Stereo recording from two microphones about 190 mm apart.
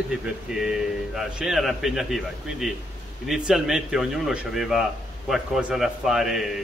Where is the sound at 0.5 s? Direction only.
Centre (ahead or behind).